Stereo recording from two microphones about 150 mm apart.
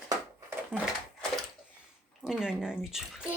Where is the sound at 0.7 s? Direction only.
15° right (ahead or behind).